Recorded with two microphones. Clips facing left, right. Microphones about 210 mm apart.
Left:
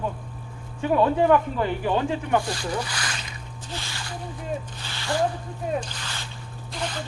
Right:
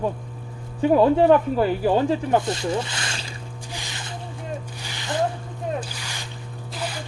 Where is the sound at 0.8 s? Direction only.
35° right (ahead or behind).